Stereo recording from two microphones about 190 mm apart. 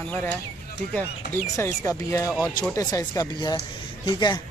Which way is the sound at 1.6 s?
15° left (ahead or behind).